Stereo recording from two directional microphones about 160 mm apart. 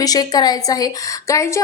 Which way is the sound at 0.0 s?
25° left (ahead or behind).